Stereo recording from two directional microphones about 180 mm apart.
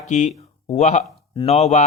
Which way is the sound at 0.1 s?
40° left (ahead or behind).